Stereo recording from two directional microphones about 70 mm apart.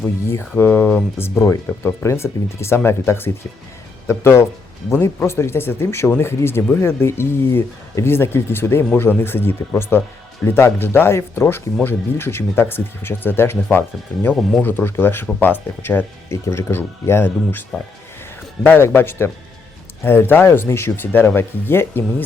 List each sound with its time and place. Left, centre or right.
0.0 s speech: left
1.4 s speech: left
16.3 s speech: left
18.6 s speech: left